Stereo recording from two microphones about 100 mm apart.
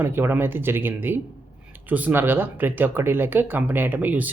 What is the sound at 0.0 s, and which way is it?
Speech, 25° right (ahead or behind).